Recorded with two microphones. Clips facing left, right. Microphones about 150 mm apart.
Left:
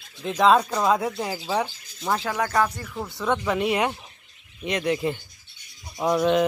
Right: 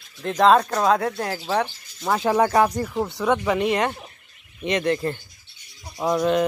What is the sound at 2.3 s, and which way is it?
Speech, 30° right (ahead or behind).